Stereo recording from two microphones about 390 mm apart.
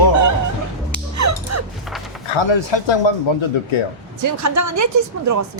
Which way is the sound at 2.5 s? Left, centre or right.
Left.